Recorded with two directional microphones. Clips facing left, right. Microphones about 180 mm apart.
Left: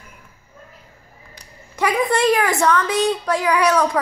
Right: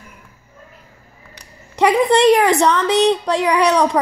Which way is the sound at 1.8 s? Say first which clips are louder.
Right 5 dB; 20° right (ahead or behind).